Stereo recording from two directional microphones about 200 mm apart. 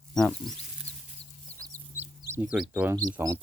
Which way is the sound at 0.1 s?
Centre (ahead or behind).